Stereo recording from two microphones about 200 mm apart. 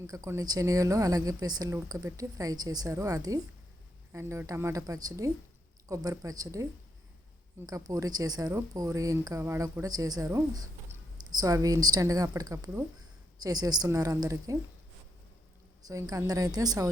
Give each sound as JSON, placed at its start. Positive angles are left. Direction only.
{"t": 0.1, "sound": "speech", "side_deg": -15}
{"t": 7.7, "sound": "speech", "side_deg": -20}
{"t": 15.8, "sound": "speech", "side_deg": -15}